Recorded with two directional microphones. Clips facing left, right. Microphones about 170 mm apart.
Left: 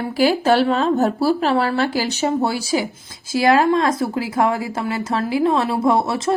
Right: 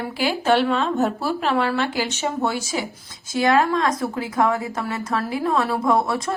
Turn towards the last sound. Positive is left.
turn(degrees=25)  # may be behind; listen again after turning